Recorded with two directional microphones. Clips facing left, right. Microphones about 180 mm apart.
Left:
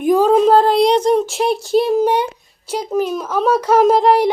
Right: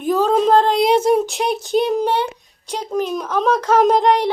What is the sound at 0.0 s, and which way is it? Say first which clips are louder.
Child singing: left 4 dB; 10° left (ahead or behind).